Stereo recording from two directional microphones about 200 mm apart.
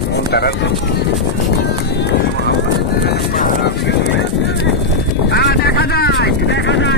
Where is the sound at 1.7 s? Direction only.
60° left (ahead or behind).